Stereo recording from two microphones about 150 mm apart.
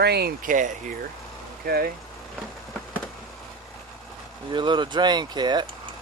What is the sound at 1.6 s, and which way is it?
Speech, 90° right.